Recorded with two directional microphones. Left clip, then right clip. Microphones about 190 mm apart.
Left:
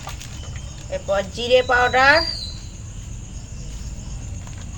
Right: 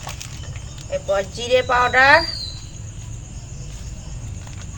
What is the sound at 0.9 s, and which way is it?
Speech, 5° left (ahead or behind).